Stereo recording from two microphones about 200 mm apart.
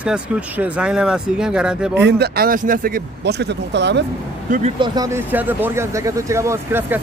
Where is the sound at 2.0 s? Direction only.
50° right (ahead or behind).